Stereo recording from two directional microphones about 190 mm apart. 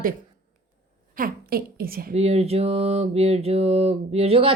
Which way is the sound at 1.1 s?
50° right (ahead or behind).